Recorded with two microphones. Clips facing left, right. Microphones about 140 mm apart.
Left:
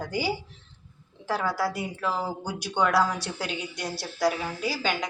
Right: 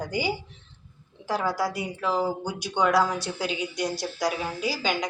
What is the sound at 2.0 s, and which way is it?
A woman's voice, centre (ahead or behind).